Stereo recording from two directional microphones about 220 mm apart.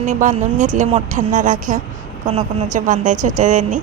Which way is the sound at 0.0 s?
35° right (ahead or behind).